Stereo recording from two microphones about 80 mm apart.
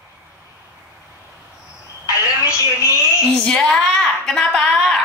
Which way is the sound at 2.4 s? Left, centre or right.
Left.